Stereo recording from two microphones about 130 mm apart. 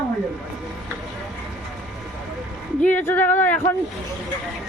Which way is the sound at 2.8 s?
15° left (ahead or behind).